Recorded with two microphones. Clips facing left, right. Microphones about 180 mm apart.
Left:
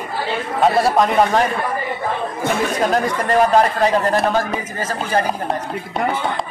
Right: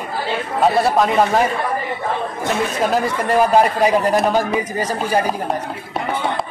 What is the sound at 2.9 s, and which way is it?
A man's voice, 5° right (ahead or behind).